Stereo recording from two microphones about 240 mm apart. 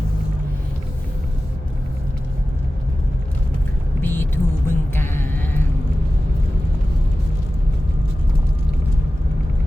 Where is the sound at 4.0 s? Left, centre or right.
Centre.